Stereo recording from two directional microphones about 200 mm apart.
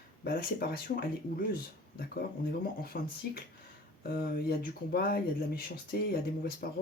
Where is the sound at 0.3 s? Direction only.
45° left (ahead or behind).